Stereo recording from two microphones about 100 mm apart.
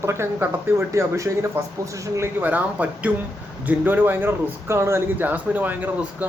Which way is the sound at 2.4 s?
15° right (ahead or behind).